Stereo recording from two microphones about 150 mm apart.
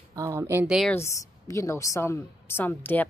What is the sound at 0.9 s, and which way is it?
A woman's voice, 20° left (ahead or behind).